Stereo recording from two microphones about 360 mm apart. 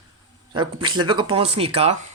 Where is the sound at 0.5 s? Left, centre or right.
Centre.